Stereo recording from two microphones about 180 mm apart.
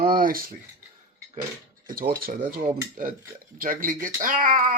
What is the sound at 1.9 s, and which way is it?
Speech, 55° right (ahead or behind).